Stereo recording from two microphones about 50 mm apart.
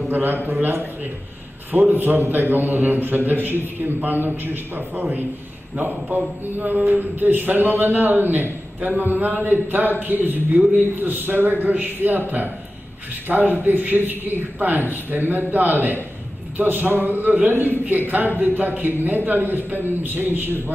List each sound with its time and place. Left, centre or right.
0.1 s a man's voice: right